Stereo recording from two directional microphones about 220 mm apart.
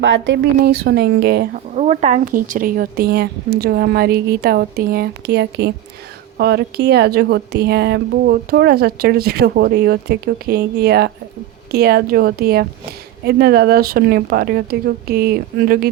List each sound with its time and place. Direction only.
0.0 s speech: 55° right (ahead or behind)
1.7 s speech: 30° right (ahead or behind)